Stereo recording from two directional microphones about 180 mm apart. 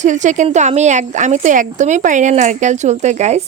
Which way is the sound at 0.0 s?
45° right (ahead or behind).